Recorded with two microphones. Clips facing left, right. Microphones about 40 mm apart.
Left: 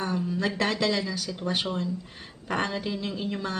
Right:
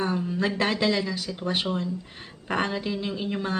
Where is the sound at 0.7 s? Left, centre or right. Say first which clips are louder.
Right 2 dB; centre.